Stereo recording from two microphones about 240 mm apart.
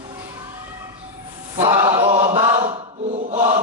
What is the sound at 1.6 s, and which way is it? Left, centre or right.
Speech, centre.